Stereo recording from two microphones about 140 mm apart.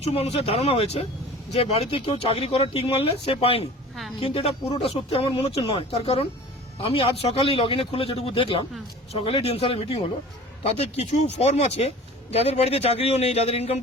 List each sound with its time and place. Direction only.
0.0 s a man's voice: 45° left (ahead or behind)